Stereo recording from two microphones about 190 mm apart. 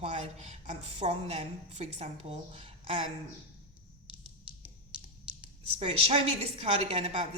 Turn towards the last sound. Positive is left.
turn(degrees=-30)  # may be behind; listen again after turning